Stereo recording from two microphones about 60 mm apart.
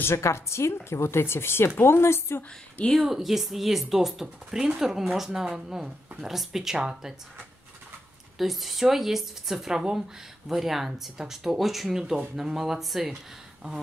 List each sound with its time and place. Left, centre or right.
0.0 s speech: left
3.0 s speech: centre
8.4 s speech: centre